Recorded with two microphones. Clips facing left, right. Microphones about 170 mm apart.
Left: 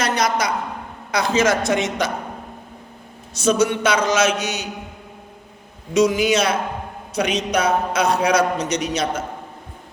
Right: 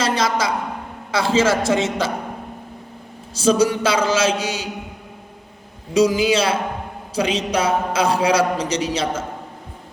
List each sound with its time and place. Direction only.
0.0 s a man's voice: 30° right (ahead or behind)
3.3 s a man's voice: 30° right (ahead or behind)
5.9 s a man's voice: 30° right (ahead or behind)